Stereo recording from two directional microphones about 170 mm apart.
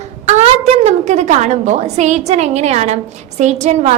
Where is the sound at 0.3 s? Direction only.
40° right (ahead or behind).